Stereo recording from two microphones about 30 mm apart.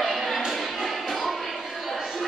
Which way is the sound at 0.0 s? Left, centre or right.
Centre.